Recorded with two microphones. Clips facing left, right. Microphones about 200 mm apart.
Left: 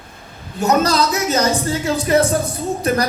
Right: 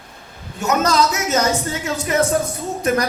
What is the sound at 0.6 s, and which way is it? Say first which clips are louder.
A woman's voice: left 2 dB; 35° left (ahead or behind).